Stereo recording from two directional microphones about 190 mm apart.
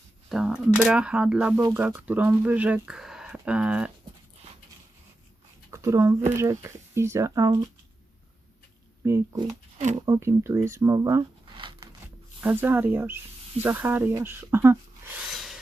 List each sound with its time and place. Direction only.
0.3 s speech: 5° right (ahead or behind)
5.7 s speech: 15° right (ahead or behind)
9.0 s speech: 15° right (ahead or behind)
9.7 s speech: 35° right (ahead or behind)
10.1 s speech: 15° right (ahead or behind)
12.4 s speech: 10° right (ahead or behind)
15.4 s rub: centre (ahead or behind)